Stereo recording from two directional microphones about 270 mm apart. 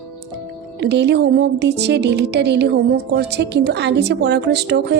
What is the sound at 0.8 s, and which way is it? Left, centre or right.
A woman's voice, right.